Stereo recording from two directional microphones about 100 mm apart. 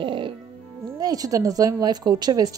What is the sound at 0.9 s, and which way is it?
Speech, 40° right (ahead or behind).